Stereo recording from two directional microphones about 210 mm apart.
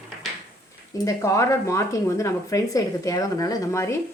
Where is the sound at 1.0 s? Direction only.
15° left (ahead or behind).